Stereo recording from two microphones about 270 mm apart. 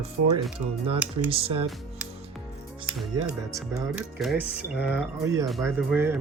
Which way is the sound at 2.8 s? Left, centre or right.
Centre.